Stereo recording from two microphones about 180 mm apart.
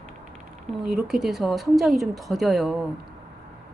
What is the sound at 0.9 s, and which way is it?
A woman's voice, 5° right (ahead or behind).